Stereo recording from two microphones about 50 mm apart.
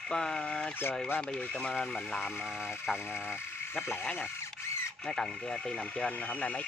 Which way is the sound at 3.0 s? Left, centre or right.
Left.